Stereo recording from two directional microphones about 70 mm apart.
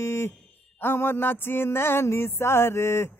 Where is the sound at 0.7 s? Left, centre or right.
Left.